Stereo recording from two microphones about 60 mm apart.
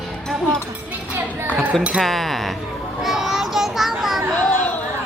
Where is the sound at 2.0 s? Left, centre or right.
Centre.